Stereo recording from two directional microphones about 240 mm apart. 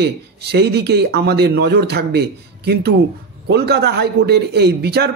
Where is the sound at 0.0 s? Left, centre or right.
Right.